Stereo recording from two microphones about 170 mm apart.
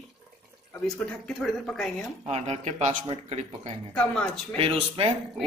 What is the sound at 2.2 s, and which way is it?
Speech, 40° right (ahead or behind).